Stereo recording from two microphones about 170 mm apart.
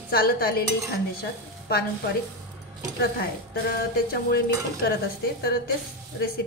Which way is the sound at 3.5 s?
70° left (ahead or behind).